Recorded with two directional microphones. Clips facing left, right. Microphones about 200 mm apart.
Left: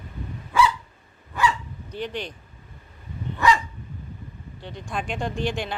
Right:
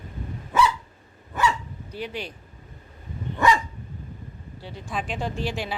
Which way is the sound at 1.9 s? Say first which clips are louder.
Left 2 dB; 5° right (ahead or behind).